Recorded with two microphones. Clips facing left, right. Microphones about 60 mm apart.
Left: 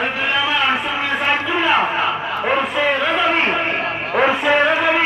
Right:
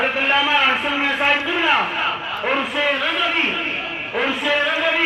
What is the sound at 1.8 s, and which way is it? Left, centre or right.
Battle cry, left.